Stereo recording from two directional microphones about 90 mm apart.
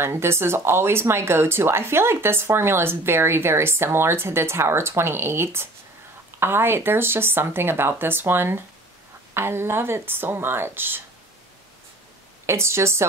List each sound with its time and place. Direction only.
0.0 s speech: 30° right (ahead or behind)
12.4 s a woman's voice: 30° right (ahead or behind)